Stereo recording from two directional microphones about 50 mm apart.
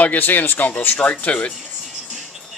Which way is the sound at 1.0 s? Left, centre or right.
Left.